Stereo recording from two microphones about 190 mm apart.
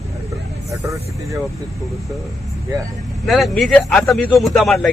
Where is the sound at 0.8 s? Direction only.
15° right (ahead or behind).